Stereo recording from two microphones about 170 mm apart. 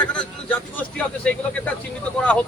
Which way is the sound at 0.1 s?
5° left (ahead or behind).